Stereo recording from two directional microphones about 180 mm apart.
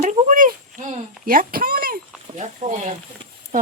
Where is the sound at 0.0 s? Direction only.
45° right (ahead or behind).